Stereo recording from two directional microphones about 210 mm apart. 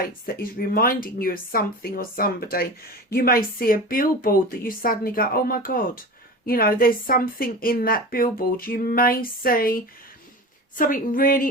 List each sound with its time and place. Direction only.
0.0 s a woman's voice: 45° left (ahead or behind)